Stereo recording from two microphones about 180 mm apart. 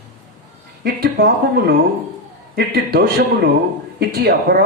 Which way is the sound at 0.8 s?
60° right (ahead or behind).